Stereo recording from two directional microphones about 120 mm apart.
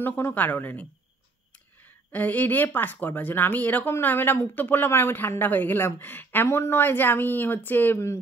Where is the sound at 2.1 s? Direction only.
15° left (ahead or behind).